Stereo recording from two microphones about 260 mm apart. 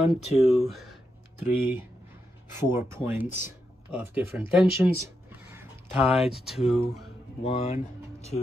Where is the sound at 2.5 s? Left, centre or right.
Centre.